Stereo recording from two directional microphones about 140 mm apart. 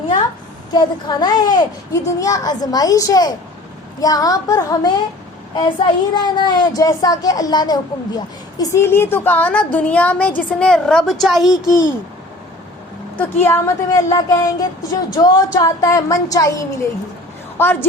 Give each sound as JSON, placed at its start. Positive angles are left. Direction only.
{"t": 0.7, "sound": "speech", "side_deg": 30}
{"t": 6.1, "sound": "a woman's voice", "side_deg": 30}
{"t": 11.6, "sound": "a child's voice", "side_deg": -30}
{"t": 13.1, "sound": "a woman's voice", "side_deg": 15}